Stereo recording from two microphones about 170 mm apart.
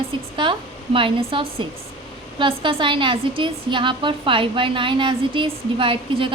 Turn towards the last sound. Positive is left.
turn(degrees=-30)  # may be behind; listen again after turning